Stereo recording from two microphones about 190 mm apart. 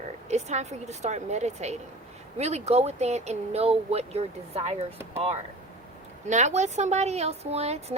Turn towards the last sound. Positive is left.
turn(degrees=-35)  # may be behind; listen again after turning